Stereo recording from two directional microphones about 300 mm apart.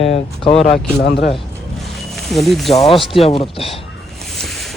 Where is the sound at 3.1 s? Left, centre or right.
Centre.